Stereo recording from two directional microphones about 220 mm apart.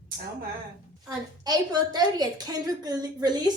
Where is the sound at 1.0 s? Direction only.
15° right (ahead or behind).